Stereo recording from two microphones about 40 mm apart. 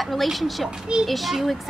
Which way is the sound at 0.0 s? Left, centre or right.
Centre.